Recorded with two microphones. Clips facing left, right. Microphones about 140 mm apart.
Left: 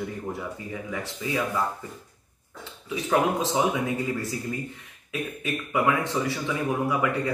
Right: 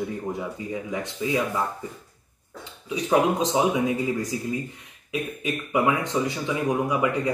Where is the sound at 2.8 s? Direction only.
20° right (ahead or behind).